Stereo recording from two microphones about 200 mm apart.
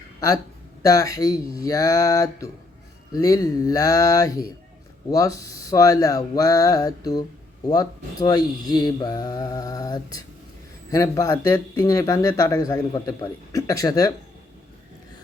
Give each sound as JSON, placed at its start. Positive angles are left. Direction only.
{"t": 0.8, "sound": "a man's voice", "side_deg": 15}